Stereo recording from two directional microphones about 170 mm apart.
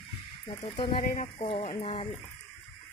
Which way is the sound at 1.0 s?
55° left (ahead or behind).